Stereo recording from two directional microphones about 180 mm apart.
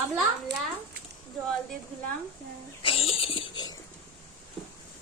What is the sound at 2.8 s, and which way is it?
Speech, 30° left (ahead or behind).